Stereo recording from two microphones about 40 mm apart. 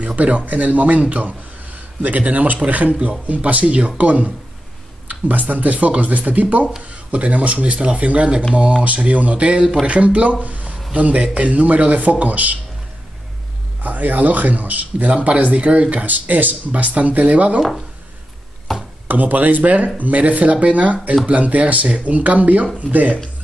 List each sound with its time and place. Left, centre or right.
0.0 s a man's voice: right
5.5 s a man's voice: right
10.4 s a sound: right
10.9 s a man's voice: right
13.8 s a man's voice: right
18.7 s a sound: centre
19.0 s a man's voice: right